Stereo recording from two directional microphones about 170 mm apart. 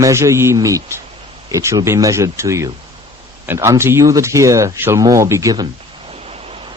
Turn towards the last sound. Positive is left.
turn(degrees=-35)  # may be behind; listen again after turning